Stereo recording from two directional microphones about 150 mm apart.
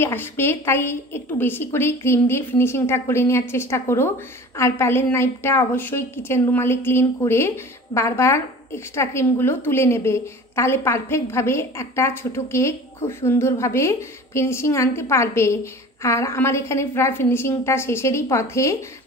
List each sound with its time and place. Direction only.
0.0 s a woman's voice: 15° left (ahead or behind)